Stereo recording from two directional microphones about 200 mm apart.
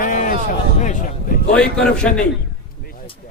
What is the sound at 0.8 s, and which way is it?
Speech, 40° left (ahead or behind).